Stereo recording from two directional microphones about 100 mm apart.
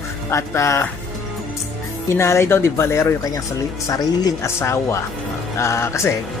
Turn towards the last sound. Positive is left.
turn(degrees=25)  # may be behind; listen again after turning